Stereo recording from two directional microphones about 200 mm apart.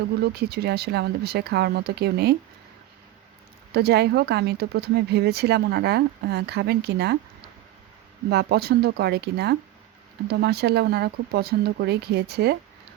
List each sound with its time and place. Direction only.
0.2 s speech: 55° right (ahead or behind)
3.7 s speech: 55° right (ahead or behind)
8.3 s speech: 55° right (ahead or behind)